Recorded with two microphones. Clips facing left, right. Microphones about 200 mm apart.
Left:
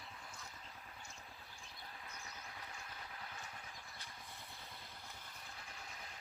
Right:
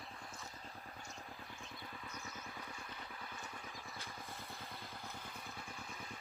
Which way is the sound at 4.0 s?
50° right (ahead or behind).